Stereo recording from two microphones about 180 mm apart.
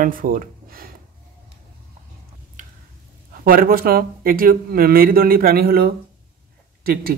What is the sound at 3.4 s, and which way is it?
Speech, 55° right (ahead or behind).